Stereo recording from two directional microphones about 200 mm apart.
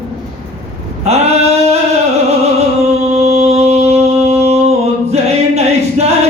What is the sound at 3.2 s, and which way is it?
Music, 30° right (ahead or behind).